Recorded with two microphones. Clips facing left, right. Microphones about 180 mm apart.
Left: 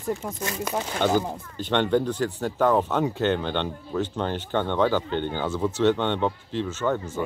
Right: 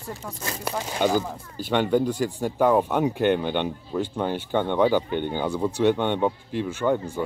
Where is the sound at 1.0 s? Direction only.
10° right (ahead or behind).